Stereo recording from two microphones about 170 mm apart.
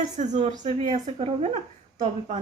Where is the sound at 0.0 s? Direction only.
45° right (ahead or behind).